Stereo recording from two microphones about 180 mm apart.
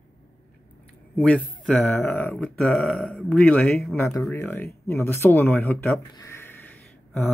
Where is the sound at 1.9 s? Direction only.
15° left (ahead or behind).